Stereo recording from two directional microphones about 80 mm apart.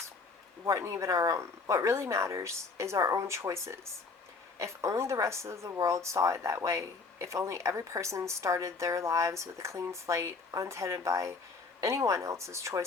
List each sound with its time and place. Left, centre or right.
0.6 s a woman's voice: right